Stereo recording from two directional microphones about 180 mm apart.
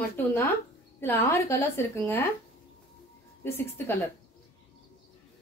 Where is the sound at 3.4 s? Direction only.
15° left (ahead or behind).